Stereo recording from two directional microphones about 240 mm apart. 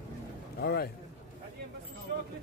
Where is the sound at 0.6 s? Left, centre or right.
Left.